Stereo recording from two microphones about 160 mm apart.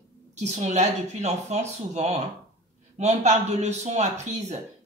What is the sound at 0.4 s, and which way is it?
Speech, 45° right (ahead or behind).